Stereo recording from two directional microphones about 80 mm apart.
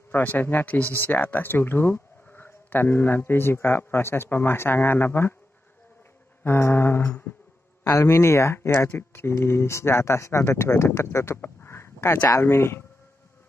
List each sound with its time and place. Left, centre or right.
0.1 s speech: left
6.4 s speech: left